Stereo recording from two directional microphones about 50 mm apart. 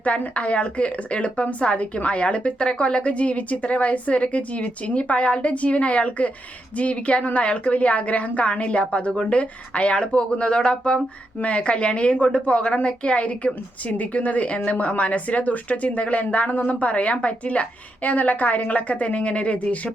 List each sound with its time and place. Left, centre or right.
0.2 s a woman's voice: left